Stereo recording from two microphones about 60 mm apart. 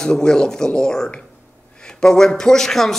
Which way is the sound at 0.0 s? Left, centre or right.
Centre.